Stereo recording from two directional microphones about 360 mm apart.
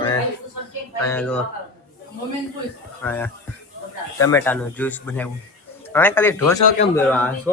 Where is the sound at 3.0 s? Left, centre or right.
Centre.